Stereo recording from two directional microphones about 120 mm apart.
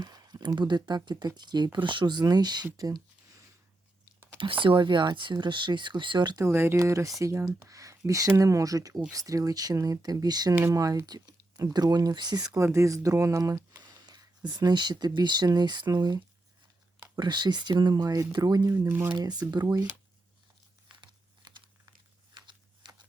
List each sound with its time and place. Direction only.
0.0 s speech: 35° right (ahead or behind)
2.7 s a sound: 30° right (ahead or behind)
4.6 s speech: 40° right (ahead or behind)
6.4 s speech: 20° right (ahead or behind)
10.5 s speech: 20° right (ahead or behind)
10.8 s speech: 30° right (ahead or behind)
19.1 s speech: 35° right (ahead or behind)
21.4 s crumpling: 40° right (ahead or behind)
22.4 s a sound: 40° right (ahead or behind)